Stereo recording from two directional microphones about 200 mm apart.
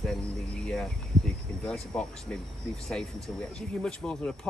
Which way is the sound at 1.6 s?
5° left (ahead or behind).